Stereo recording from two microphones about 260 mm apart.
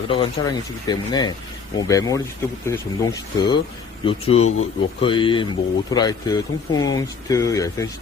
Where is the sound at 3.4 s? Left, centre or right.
Centre.